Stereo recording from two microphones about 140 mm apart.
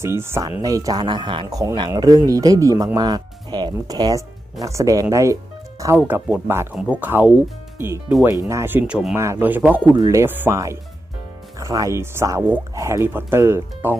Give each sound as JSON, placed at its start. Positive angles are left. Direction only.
{"t": 0.0, "sound": "speech", "side_deg": -20}
{"t": 1.5, "sound": "speech", "side_deg": -25}
{"t": 9.1, "sound": "speech", "side_deg": -20}
{"t": 9.9, "sound": "speech", "side_deg": -25}